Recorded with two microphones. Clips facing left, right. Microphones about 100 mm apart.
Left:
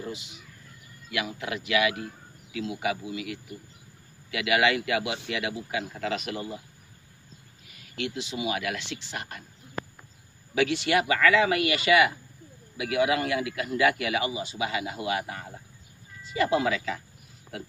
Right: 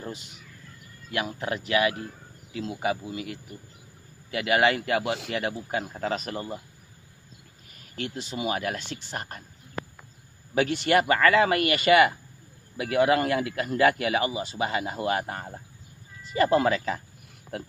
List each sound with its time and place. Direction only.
0.0 s speech: 45° right (ahead or behind)
7.9 s a man's voice: 40° right (ahead or behind)
10.5 s a man's voice: 45° right (ahead or behind)